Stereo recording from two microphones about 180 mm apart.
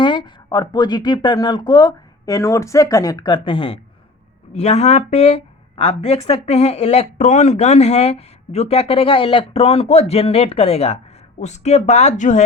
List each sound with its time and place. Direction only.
0.0 s a woman's voice: 25° left (ahead or behind); by 12.5 s 45° left (ahead or behind)